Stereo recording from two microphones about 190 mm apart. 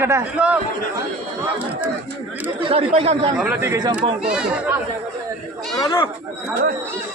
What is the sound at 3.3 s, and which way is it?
Speech, 5° right (ahead or behind).